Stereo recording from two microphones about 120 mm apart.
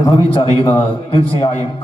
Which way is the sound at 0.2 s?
45° left (ahead or behind).